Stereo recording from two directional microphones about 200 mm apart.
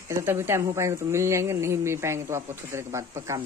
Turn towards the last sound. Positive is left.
turn(degrees=-15)  # may be behind; listen again after turning